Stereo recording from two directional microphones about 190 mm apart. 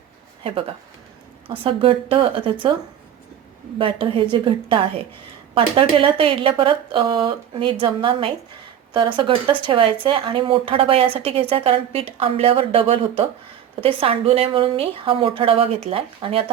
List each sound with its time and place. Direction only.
1.5 s speech: 30° right (ahead or behind)
3.8 s speech: 25° right (ahead or behind)